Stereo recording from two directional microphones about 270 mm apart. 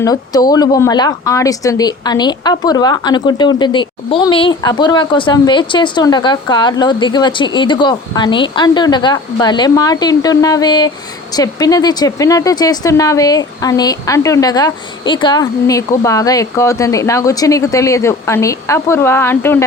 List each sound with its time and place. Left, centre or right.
0.0 s a woman's voice: centre